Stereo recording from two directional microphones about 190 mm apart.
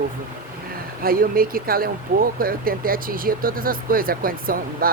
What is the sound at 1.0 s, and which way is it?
Speech, 50° right (ahead or behind).